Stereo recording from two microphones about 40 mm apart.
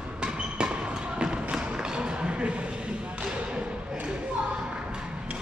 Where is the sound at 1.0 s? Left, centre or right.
Right.